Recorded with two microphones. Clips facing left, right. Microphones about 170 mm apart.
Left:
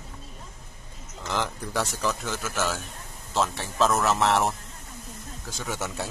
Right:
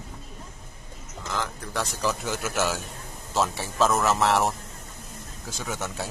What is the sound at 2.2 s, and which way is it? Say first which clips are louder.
Speech: right 2 dB; 10° right (ahead or behind).